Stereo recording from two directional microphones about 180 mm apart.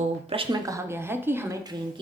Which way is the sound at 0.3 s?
25° right (ahead or behind).